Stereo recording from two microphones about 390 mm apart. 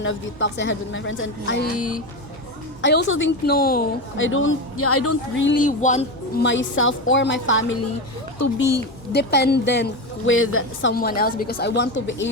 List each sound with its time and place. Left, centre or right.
0.0 s a woman's voice: left